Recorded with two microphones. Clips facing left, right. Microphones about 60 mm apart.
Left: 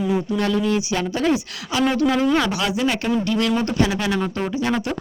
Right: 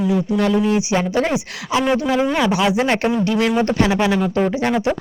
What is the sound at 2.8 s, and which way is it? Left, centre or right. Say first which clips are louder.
Speech: right 4 dB; right.